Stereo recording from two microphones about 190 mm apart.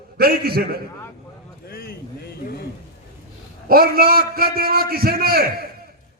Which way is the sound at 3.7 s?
50° right (ahead or behind).